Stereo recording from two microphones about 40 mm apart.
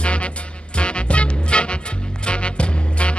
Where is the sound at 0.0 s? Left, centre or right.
Left.